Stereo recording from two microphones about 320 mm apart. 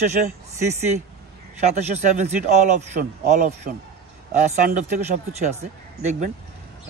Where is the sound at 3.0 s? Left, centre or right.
Right.